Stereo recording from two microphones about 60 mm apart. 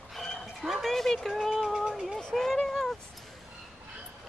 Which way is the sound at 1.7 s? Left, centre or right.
Centre.